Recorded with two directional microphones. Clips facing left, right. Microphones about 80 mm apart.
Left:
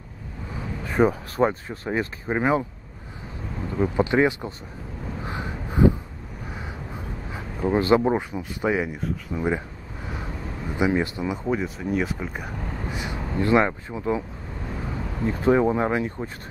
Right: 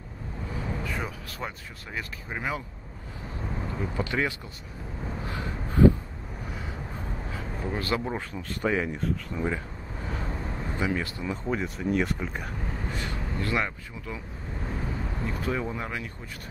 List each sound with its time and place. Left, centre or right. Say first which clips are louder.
0.8 s speech: left 13 dB; left
3.8 s speech: left 10 dB; left
5.2 s a sound: left 4 dB; left
7.6 s speech: left 11 dB; left
10.8 s speech: left 8 dB; centre
11.5 s speech: right 1 dB; centre; by 14.2 s left
15.2 s speech: left 12 dB; left